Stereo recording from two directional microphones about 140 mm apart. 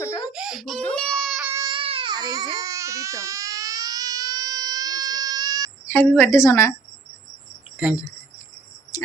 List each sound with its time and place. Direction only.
0.3 s baby cry: 5° right (ahead or behind)
1.5 s baby cry: 30° right (ahead or behind)
1.8 s baby cry: 40° right (ahead or behind)
5.9 s a woman's voice: 15° left (ahead or behind)
8.9 s a sound: 25° left (ahead or behind)